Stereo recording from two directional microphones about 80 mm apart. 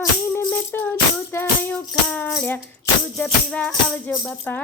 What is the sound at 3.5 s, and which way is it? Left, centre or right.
Music, centre.